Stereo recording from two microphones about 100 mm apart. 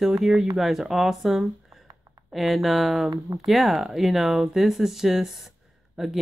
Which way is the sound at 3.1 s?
40° right (ahead or behind).